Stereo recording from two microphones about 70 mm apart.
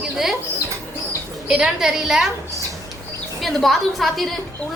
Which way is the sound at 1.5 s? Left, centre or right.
Centre.